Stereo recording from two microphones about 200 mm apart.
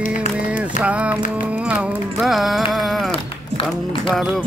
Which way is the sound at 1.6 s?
5° right (ahead or behind).